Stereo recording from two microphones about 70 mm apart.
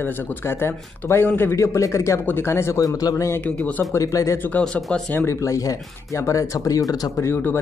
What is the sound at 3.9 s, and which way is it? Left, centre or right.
Speech, left.